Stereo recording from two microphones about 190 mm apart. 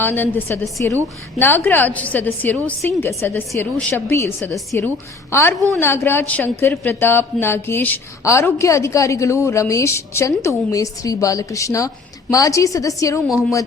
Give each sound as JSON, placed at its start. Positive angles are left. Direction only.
{"t": 0.0, "sound": "a woman's voice", "side_deg": 10}